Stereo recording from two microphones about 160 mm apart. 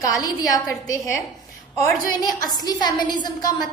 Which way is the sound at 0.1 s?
25° left (ahead or behind).